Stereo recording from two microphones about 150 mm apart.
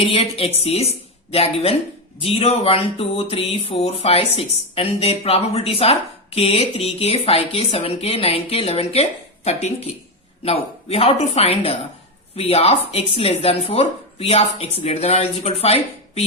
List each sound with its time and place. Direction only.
0.0 s speech: 40° left (ahead or behind)